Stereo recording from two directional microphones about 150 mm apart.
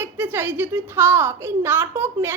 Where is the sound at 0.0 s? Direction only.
15° right (ahead or behind).